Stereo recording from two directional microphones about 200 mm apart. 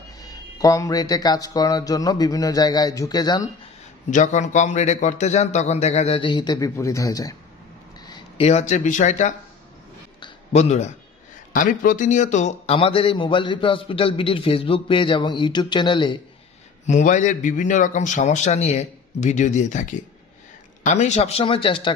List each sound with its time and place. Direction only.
0.2 s a man's voice: 20° left (ahead or behind)
4.1 s a man's voice: 40° left (ahead or behind); by 7.3 s 15° left (ahead or behind)
8.0 s a sound: 20° left (ahead or behind)
8.5 s a man's voice: 35° left (ahead or behind)
10.2 s a sound: 35° left (ahead or behind)
11.5 s a man's voice: 40° left (ahead or behind); by 16.2 s 25° left (ahead or behind)
16.8 s a man's voice: 40° left (ahead or behind)